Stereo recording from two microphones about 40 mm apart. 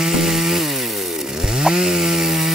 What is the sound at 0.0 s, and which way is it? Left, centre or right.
Chainsaw, centre.